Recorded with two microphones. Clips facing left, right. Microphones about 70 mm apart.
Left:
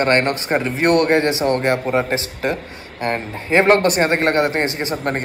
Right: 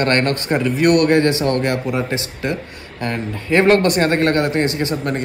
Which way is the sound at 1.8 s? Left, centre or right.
Left.